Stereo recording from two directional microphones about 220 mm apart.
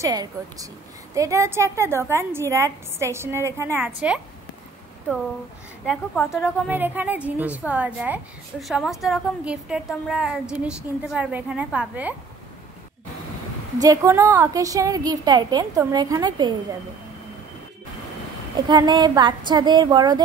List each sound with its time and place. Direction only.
0.0 s a woman's voice: 15° right (ahead or behind)
6.1 s a woman's voice: 5° right (ahead or behind)
13.7 s a woman's voice: 15° right (ahead or behind)
18.7 s speech: 20° right (ahead or behind)